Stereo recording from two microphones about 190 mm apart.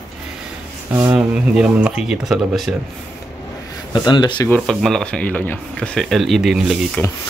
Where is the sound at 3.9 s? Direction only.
25° left (ahead or behind).